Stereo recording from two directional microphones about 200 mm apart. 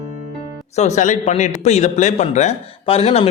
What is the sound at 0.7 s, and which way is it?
A man's voice, 35° left (ahead or behind).